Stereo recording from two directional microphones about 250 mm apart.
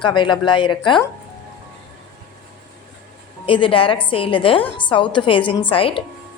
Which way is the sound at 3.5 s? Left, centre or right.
Left.